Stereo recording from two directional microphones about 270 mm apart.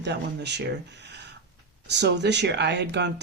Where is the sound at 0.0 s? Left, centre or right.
Right.